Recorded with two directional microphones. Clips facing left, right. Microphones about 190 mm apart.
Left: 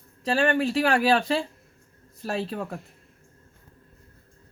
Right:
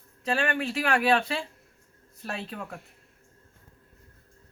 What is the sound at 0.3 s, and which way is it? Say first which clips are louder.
Speech: left 5 dB; 35° left (ahead or behind).